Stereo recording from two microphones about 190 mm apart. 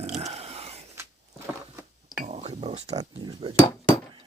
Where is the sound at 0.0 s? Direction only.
35° right (ahead or behind).